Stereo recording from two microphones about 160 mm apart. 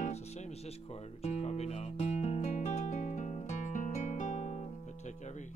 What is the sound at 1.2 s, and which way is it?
Music, 40° left (ahead or behind).